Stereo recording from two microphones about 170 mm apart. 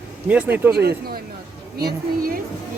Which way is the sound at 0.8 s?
65° right (ahead or behind).